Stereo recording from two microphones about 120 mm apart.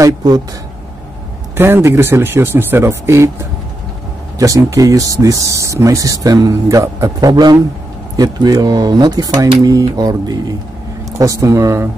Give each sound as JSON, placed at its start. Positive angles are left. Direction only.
{"t": 0.0, "sound": "speech", "side_deg": -35}
{"t": 1.6, "sound": "speech", "side_deg": -20}
{"t": 4.4, "sound": "speech", "side_deg": -25}